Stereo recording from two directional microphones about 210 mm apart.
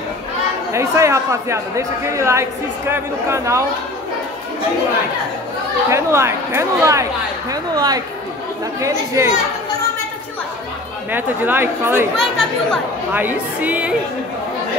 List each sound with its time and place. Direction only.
0.7 s speech: 15° right (ahead or behind)
5.9 s speech: 15° right (ahead or behind)
11.1 s speech: 10° right (ahead or behind)
12.2 s speech: centre (ahead or behind)
13.1 s speech: 10° right (ahead or behind)